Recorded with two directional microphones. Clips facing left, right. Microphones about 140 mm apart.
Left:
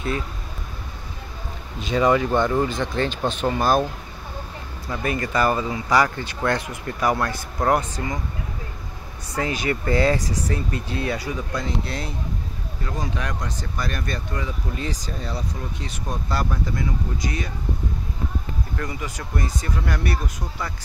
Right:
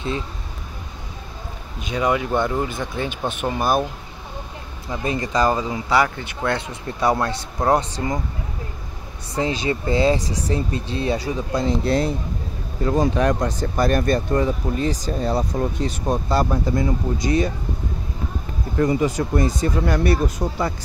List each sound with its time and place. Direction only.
1.9 s speech: 5° right (ahead or behind)
4.8 s speech: 20° right (ahead or behind)
6.7 s speech: 30° right (ahead or behind)
9.3 s speech: 25° right (ahead or behind); by 15.7 s 50° right (ahead or behind)
16.3 s speech: 30° right (ahead or behind)
18.8 s speech: 30° right (ahead or behind)